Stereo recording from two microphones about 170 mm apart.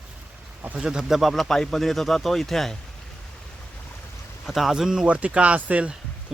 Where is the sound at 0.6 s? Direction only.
5° right (ahead or behind).